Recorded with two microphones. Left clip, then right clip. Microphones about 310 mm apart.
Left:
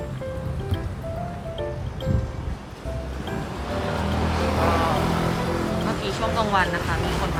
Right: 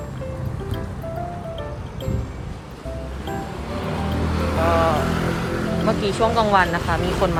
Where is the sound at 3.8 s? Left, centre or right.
Centre.